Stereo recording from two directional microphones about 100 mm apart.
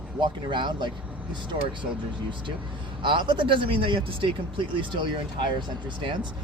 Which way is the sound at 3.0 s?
55° right (ahead or behind).